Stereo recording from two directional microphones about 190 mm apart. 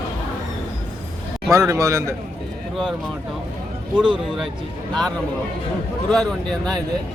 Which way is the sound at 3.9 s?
5° right (ahead or behind).